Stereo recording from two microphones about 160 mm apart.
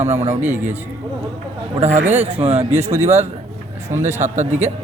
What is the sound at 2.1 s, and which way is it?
Speech, 40° right (ahead or behind).